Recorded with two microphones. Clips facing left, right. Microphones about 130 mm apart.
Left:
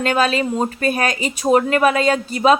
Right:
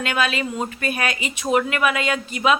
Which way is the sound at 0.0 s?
40° left (ahead or behind).